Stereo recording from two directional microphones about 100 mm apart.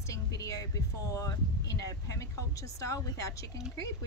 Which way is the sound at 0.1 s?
35° left (ahead or behind).